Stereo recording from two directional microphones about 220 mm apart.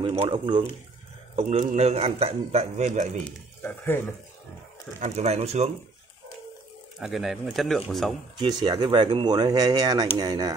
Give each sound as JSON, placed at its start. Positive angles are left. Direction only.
{"t": 0.0, "sound": "a man's voice", "side_deg": -20}
{"t": 3.3, "sound": "speech", "side_deg": 10}
{"t": 5.0, "sound": "a man's voice", "side_deg": -30}
{"t": 7.0, "sound": "speech", "side_deg": 0}
{"t": 8.6, "sound": "a man's voice", "side_deg": -20}